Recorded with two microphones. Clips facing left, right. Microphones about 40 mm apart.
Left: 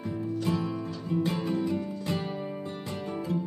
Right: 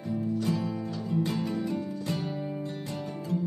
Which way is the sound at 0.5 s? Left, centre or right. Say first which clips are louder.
Even; left.